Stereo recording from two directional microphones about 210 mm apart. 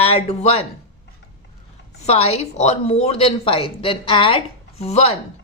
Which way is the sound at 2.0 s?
30° left (ahead or behind).